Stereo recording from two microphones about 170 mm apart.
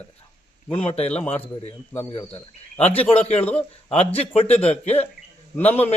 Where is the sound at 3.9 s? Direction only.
35° left (ahead or behind).